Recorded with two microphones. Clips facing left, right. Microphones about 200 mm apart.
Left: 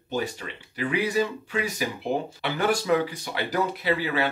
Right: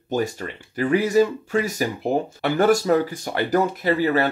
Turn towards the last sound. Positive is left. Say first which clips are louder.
# right 6 dB
turn(degrees=-45)  # may be behind; listen again after turning